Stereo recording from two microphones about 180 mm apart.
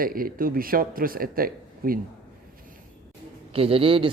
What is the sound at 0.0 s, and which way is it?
Speech, 50° right (ahead or behind).